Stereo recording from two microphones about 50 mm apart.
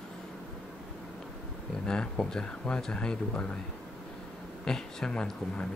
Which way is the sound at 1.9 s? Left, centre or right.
Centre.